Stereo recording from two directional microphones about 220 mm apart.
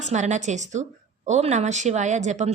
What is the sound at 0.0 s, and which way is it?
A woman's voice, 30° right (ahead or behind).